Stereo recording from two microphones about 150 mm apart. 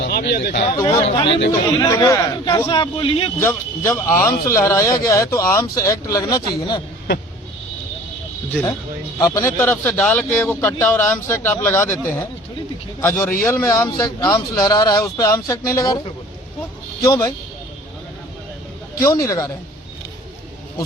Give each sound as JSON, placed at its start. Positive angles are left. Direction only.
{"t": 0.1, "sound": "speech", "side_deg": 90}
{"t": 0.7, "sound": "speech", "side_deg": 25}
{"t": 1.0, "sound": "speech", "side_deg": 40}
{"t": 1.8, "sound": "speech", "side_deg": 20}
{"t": 3.4, "sound": "speech", "side_deg": 20}
{"t": 9.1, "sound": "speech", "side_deg": 25}
{"t": 17.1, "sound": "speech", "side_deg": 25}
{"t": 18.9, "sound": "speech", "side_deg": 20}